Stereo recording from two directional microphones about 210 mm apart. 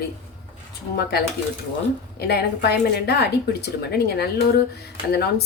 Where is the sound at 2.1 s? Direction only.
50° left (ahead or behind).